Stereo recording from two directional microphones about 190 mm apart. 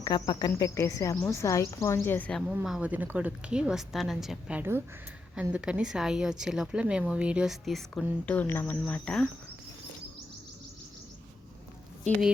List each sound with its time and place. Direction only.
0.0 s speech: 25° left (ahead or behind)
2.5 s a woman's voice: 5° right (ahead or behind)